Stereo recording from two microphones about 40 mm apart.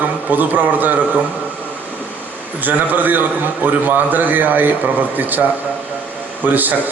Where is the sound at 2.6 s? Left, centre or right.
Right.